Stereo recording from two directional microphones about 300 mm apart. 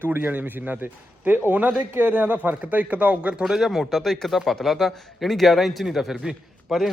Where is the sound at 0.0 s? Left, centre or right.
Centre.